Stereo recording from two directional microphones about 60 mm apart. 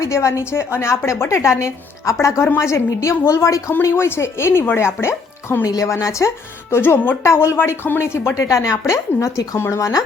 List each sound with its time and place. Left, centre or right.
0.0 s a woman's voice: left
5.6 s a woman's voice: left
5.9 s a woman's voice: left
7.2 s a woman's voice: left
8.9 s a woman's voice: left
9.7 s a woman's voice: left